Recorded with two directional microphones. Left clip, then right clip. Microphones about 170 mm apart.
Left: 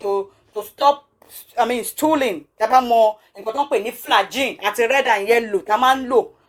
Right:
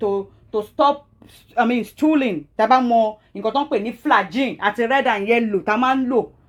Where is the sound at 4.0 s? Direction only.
65° left (ahead or behind).